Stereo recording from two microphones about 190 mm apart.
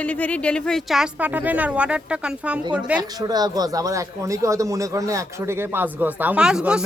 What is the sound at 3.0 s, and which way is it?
Speech, 20° right (ahead or behind).